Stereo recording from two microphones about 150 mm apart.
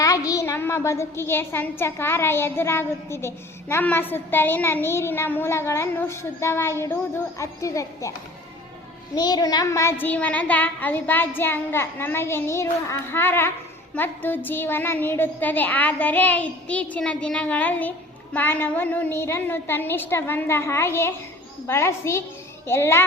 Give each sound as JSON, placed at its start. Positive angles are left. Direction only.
{"t": 0.0, "sound": "a sound", "side_deg": 25}
{"t": 1.3, "sound": "a child's voice", "side_deg": 15}
{"t": 9.1, "sound": "a child's voice", "side_deg": 25}